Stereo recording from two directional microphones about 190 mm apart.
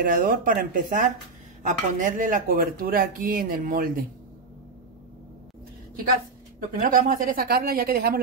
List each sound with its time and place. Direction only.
0.0 s speech: 50° right (ahead or behind)
6.7 s speech: 45° right (ahead or behind)